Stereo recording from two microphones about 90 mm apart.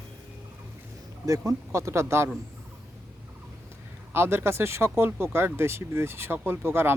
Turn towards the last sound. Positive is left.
turn(degrees=-25)  # may be behind; listen again after turning